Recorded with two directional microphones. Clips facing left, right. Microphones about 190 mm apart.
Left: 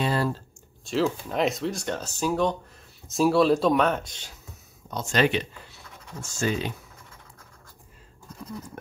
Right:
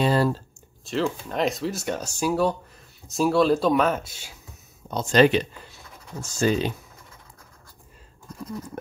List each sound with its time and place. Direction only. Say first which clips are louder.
0.0 s a sound: right 4 dB; 35° right (ahead or behind)
0.8 s speech: left 1 dB; centre (ahead or behind)
4.9 s speech: right 6 dB; 35° right (ahead or behind)